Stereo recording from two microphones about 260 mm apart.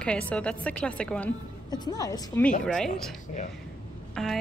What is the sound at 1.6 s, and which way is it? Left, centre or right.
Speech, centre.